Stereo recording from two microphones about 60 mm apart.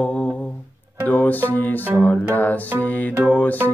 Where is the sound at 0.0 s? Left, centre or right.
Centre.